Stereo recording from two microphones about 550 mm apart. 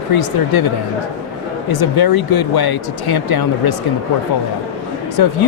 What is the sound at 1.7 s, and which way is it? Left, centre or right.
Speech, left.